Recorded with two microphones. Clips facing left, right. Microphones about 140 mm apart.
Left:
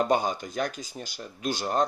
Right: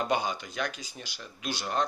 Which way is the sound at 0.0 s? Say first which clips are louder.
Left 4 dB; 45° left (ahead or behind).